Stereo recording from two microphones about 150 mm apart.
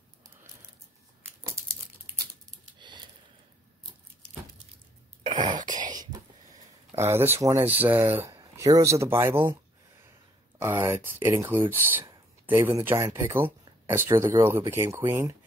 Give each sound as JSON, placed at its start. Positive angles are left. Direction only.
{"t": 2.8, "sound": "a sound", "side_deg": -30}
{"t": 5.2, "sound": "throat clearing", "side_deg": -30}
{"t": 7.0, "sound": "speech", "side_deg": -15}
{"t": 10.6, "sound": "speech", "side_deg": -15}